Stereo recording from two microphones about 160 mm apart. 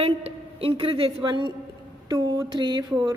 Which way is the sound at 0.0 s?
35° right (ahead or behind).